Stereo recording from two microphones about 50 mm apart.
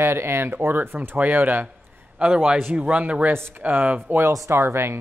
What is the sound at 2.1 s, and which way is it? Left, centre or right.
Speech, right.